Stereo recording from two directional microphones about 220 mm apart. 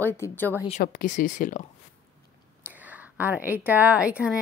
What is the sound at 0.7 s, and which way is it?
Speech, 35° left (ahead or behind).